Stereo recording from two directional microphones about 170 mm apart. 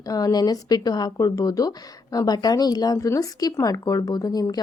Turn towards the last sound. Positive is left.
turn(degrees=20)  # may be behind; listen again after turning